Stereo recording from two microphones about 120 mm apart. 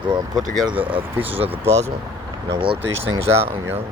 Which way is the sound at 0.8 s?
45° right (ahead or behind).